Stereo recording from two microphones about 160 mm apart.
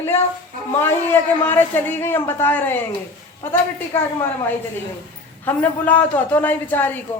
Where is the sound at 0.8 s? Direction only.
15° left (ahead or behind).